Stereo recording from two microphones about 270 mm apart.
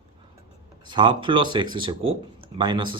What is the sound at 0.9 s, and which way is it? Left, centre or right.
Speech, centre.